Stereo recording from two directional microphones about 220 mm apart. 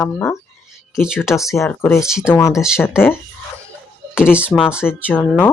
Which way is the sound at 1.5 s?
10° left (ahead or behind).